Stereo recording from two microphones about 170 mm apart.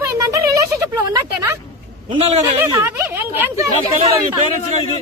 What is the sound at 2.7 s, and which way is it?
Speech, 15° right (ahead or behind).